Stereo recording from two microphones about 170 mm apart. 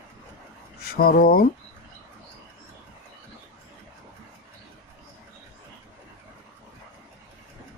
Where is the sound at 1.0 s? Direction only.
60° left (ahead or behind).